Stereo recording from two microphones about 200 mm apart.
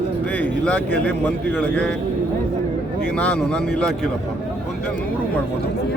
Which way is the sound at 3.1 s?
5° left (ahead or behind).